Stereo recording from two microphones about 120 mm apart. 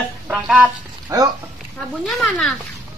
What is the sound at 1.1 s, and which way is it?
Speech, 30° right (ahead or behind).